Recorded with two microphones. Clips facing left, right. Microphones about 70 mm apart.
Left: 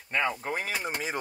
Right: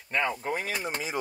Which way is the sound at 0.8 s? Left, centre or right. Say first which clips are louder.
Even; left.